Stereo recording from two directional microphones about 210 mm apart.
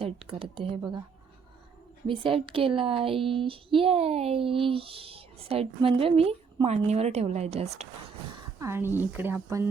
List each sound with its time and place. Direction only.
0.0 s speech: 25° right (ahead or behind)
2.0 s speech: 25° right (ahead or behind)
8.5 s speech: 10° right (ahead or behind)